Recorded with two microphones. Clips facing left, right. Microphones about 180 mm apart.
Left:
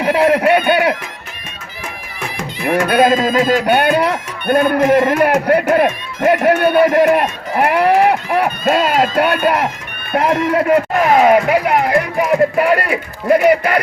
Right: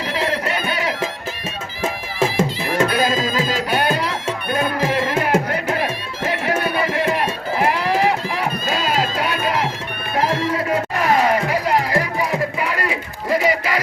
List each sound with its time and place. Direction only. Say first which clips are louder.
0.0 s a sound: left 10 dB; 65° left (ahead or behind)
1.8 s music: right 8 dB; 25° right (ahead or behind)
2.9 s speech: left 7 dB; 60° left (ahead or behind)
4.4 s music: left 10 dB; 65° left (ahead or behind)
4.8 s music: left 8 dB; 50° left (ahead or behind)
6.2 s a sound: left 9 dB; 60° left (ahead or behind)
7.6 s run: left 7 dB; 60° left (ahead or behind)
10.1 s music: left 5 dB; 60° left (ahead or behind)